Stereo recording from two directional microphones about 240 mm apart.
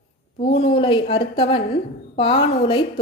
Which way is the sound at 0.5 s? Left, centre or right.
Left.